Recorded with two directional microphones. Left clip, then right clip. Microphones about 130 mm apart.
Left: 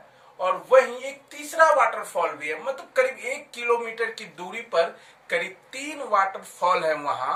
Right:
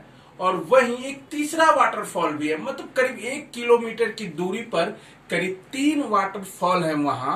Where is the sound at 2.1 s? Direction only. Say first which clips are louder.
Even; 10° left (ahead or behind).